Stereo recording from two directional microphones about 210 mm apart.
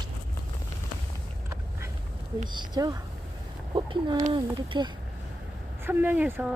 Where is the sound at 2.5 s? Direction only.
20° right (ahead or behind).